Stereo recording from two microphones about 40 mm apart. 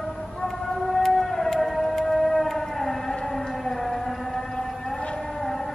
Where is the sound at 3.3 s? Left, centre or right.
Centre.